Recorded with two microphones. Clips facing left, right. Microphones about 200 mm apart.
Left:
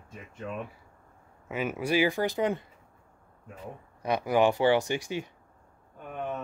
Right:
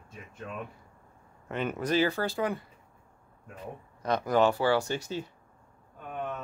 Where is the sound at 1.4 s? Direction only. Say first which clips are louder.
Left 1 dB; 5° left (ahead or behind); by 2.7 s 20° left (ahead or behind).